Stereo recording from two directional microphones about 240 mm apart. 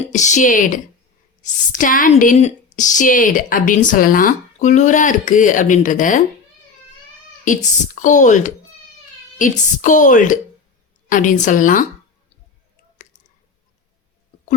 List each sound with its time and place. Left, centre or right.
0.1 s speech: left
7.4 s speech: left